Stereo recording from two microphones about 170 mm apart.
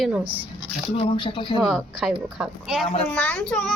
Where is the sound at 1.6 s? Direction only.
Centre (ahead or behind).